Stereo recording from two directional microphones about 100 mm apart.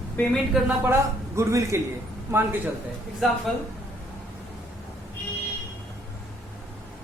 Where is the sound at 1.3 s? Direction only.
30° right (ahead or behind).